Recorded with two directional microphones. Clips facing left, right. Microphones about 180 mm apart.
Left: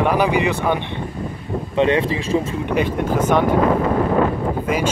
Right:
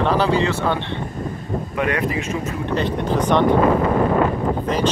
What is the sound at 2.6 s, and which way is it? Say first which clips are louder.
Speech: left 2 dB; 10° left (ahead or behind).